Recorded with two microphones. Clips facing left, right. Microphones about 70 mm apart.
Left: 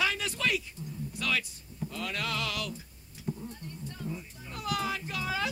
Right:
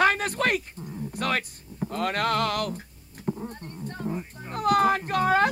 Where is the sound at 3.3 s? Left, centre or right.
Right.